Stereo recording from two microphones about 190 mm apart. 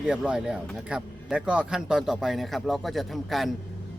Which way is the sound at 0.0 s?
5° right (ahead or behind).